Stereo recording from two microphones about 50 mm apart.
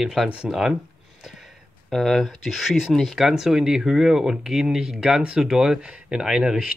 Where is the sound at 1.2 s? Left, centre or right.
Centre.